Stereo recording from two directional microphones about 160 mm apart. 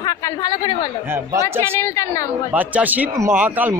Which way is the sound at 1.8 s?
20° left (ahead or behind).